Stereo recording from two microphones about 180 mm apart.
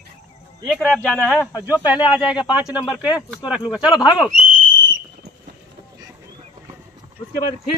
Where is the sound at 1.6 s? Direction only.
10° right (ahead or behind).